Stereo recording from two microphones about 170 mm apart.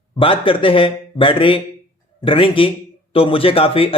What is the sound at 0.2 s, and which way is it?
A man's voice, 30° left (ahead or behind).